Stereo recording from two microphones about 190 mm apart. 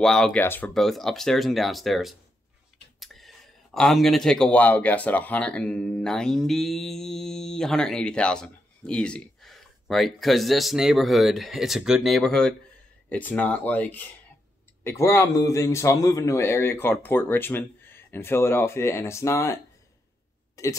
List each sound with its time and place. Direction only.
0.0 s a man's voice: 5° left (ahead or behind)